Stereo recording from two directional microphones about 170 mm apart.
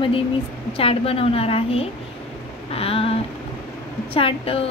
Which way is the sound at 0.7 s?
35° left (ahead or behind).